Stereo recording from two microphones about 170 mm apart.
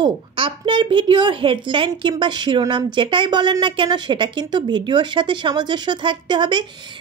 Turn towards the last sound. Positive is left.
turn(degrees=-25)  # may be behind; listen again after turning